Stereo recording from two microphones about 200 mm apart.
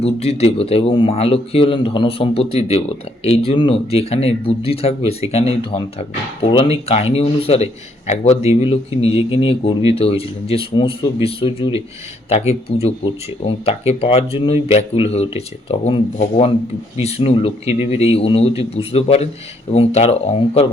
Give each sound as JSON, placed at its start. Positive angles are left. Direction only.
{"t": 0.0, "sound": "speech", "side_deg": 30}